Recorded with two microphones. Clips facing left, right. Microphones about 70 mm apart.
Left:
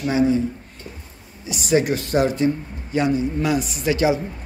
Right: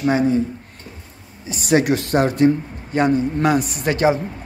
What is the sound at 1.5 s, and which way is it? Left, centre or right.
Speech, right.